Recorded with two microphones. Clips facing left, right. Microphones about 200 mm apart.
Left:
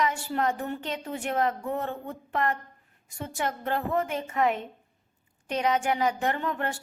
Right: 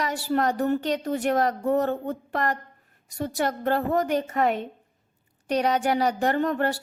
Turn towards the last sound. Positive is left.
turn(degrees=-35)  # may be behind; listen again after turning